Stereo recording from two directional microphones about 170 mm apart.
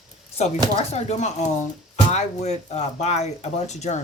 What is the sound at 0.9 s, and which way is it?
Speech, 40° left (ahead or behind).